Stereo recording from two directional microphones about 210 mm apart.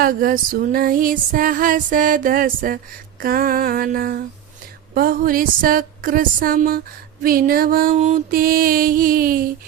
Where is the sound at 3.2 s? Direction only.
45° right (ahead or behind).